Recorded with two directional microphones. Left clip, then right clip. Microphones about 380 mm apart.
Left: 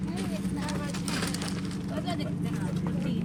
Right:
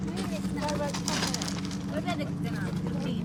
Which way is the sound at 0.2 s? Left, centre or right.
Right.